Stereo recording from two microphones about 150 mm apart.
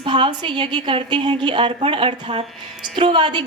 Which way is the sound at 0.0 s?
35° right (ahead or behind).